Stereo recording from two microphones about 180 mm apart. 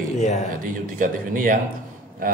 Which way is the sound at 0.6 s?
50° right (ahead or behind).